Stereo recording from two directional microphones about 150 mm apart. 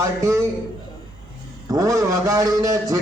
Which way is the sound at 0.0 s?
20° right (ahead or behind).